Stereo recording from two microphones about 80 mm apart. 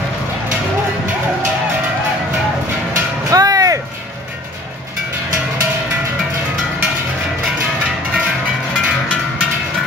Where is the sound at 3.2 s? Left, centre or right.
Right.